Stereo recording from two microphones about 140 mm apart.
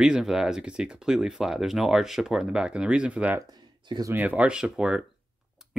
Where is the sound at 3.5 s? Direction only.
30° right (ahead or behind).